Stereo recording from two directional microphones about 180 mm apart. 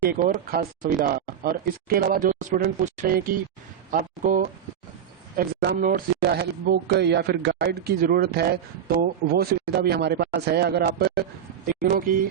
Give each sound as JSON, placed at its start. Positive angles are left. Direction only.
{"t": 0.0, "sound": "speech", "side_deg": -55}